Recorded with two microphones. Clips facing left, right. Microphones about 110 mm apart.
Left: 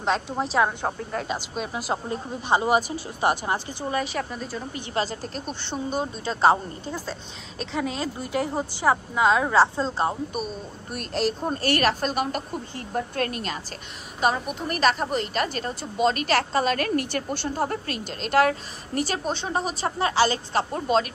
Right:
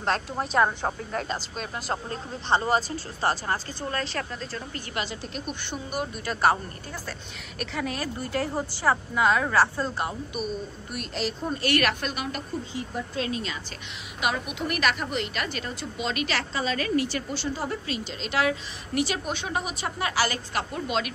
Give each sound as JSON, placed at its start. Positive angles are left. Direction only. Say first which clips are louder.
{"t": 0.0, "sound": "a woman's voice", "louder": "left 2 dB", "side_deg": 0}
{"t": 4.9, "sound": "speech", "louder": "left 5 dB", "side_deg": 40}
{"t": 10.9, "sound": "a woman's voice", "louder": "left 6 dB", "side_deg": 45}
{"t": 14.2, "sound": "a woman's voice", "louder": "left 4 dB", "side_deg": 35}
{"t": 20.7, "sound": "a woman's voice", "louder": "left 6 dB", "side_deg": 40}